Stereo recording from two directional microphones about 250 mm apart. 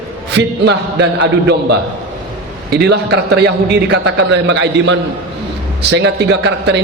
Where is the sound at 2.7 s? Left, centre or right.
Right.